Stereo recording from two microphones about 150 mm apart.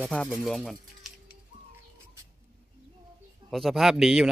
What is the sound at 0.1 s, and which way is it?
Speech, 5° left (ahead or behind).